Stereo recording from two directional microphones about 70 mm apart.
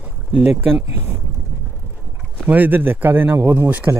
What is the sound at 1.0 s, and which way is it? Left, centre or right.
Speech, right.